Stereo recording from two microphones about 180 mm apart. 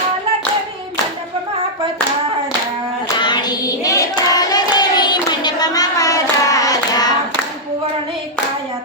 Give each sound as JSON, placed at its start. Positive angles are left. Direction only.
{"t": 3.2, "sound": "hands", "side_deg": 25}